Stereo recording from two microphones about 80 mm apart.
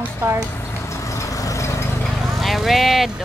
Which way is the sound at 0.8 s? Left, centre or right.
Left.